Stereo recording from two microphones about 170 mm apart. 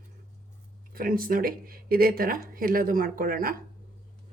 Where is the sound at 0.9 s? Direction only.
55° right (ahead or behind).